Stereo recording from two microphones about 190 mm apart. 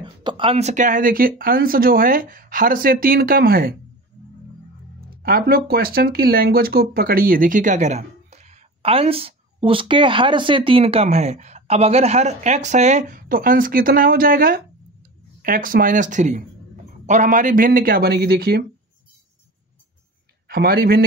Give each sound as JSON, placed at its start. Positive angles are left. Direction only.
{"t": 0.0, "sound": "speech", "side_deg": -25}
{"t": 5.1, "sound": "speech", "side_deg": -50}
{"t": 20.4, "sound": "speech", "side_deg": -55}